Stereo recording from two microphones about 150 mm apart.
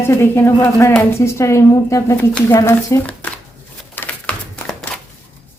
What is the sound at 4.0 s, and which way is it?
Typewriter, 5° left (ahead or behind).